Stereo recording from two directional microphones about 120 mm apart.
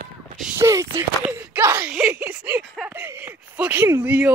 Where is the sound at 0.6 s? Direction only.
25° right (ahead or behind).